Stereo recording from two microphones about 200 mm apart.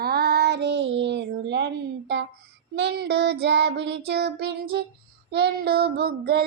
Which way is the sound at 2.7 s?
55° right (ahead or behind).